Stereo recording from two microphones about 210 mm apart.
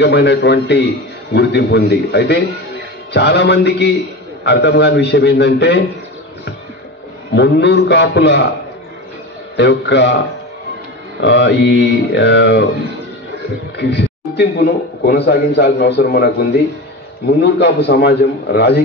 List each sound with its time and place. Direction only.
0.0 s mantra: 55° left (ahead or behind)
1.3 s a man's voice: 55° left (ahead or behind)
3.1 s mantra: 55° left (ahead or behind)
7.3 s mantra: 55° left (ahead or behind)
9.6 s mantra: 55° left (ahead or behind)
11.1 s mantra: 55° left (ahead or behind)
13.7 s a man's voice: 55° left (ahead or behind)